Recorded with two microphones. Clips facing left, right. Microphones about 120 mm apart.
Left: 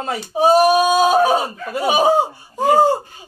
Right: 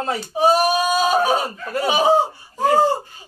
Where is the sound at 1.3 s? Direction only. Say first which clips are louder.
Left 2 dB; 15° left (ahead or behind).